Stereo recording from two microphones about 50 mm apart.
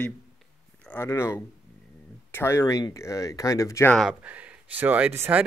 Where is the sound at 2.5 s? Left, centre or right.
Left.